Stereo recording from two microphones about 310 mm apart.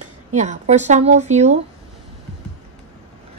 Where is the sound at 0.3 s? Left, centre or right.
Right.